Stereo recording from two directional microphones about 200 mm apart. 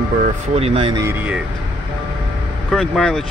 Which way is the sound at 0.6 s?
30° right (ahead or behind).